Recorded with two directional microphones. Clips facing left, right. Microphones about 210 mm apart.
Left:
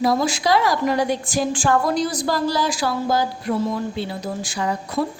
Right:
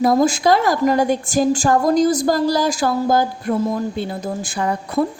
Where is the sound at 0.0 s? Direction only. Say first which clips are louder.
Right 5 dB; 50° right (ahead or behind).